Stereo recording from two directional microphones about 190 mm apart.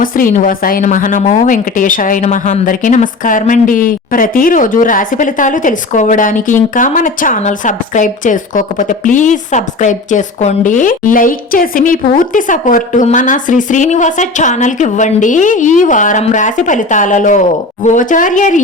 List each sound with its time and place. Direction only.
0.0 s a woman's voice: 45° left (ahead or behind)